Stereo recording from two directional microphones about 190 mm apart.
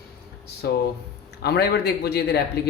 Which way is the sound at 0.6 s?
55° left (ahead or behind).